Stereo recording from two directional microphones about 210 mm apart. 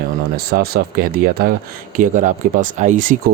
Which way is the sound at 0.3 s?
45° right (ahead or behind).